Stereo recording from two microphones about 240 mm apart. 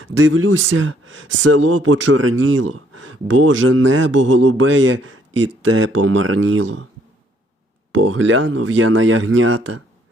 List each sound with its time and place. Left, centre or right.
0.0 s speech: right
7.9 s speech: right